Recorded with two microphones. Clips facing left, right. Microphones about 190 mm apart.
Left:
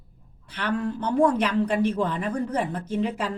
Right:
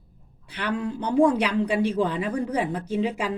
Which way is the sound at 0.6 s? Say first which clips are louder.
Left 1 dB; 15° right (ahead or behind).